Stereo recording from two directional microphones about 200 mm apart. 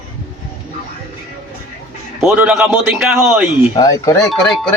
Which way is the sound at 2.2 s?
5° right (ahead or behind).